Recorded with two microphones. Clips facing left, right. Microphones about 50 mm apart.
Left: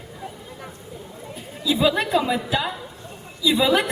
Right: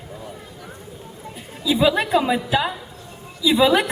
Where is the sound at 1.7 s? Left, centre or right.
Centre.